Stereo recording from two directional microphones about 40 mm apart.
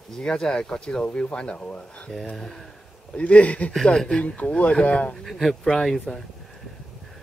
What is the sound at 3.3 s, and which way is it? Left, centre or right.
Speech, left.